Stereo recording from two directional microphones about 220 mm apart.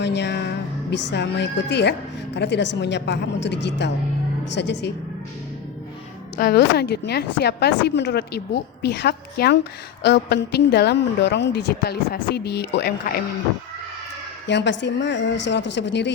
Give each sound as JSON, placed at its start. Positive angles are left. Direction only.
{"t": 0.0, "sound": "a woman's voice", "side_deg": 50}
{"t": 6.3, "sound": "a woman's voice", "side_deg": 45}
{"t": 14.4, "sound": "a woman's voice", "side_deg": 50}